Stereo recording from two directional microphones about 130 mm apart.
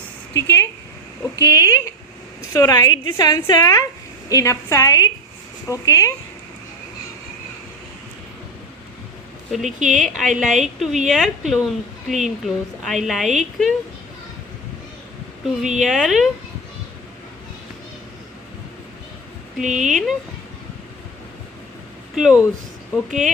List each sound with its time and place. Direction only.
0.3 s a woman's voice: 20° left (ahead or behind)
9.5 s a woman's voice: centre (ahead or behind)
15.6 s a woman's voice: centre (ahead or behind)
19.7 s a woman's voice: centre (ahead or behind)
22.1 s a woman's voice: 5° right (ahead or behind)